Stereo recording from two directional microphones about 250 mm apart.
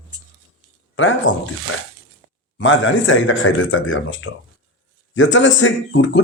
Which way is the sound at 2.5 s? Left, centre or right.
Left.